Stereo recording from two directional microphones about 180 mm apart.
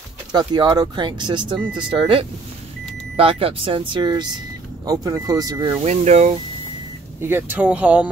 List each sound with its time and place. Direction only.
0.3 s speech: 25° right (ahead or behind)
5.9 s speech: 40° right (ahead or behind)
7.2 s speech: 10° right (ahead or behind)